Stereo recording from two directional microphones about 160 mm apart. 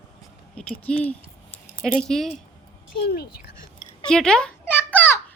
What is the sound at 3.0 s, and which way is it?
Speech, 80° left.